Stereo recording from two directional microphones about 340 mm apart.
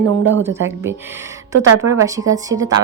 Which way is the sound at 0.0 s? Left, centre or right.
Right.